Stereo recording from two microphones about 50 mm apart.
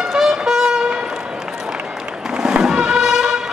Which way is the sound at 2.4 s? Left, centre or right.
Centre.